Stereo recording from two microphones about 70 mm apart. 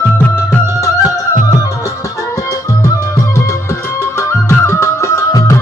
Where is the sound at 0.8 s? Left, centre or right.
Left.